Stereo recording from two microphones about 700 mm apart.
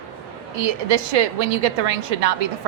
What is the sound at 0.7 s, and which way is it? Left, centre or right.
A woman's voice, right.